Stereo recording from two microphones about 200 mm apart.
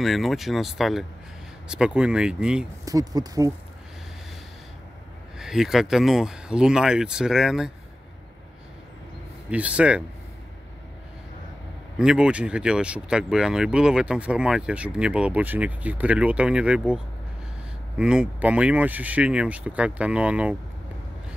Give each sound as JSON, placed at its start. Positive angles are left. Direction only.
{"t": 0.0, "sound": "speech", "side_deg": 0}
{"t": 2.8, "sound": "speech", "side_deg": -20}
{"t": 5.4, "sound": "speech", "side_deg": 0}
{"t": 9.5, "sound": "speech", "side_deg": -5}
{"t": 12.0, "sound": "speech", "side_deg": -5}